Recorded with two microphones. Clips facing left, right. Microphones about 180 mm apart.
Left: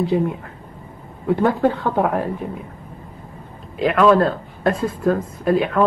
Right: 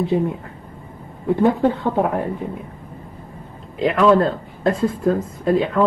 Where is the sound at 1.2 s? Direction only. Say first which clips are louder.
Right 1 dB; 20° right (ahead or behind).